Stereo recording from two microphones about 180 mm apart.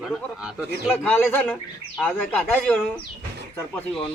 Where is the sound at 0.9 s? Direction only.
10° left (ahead or behind).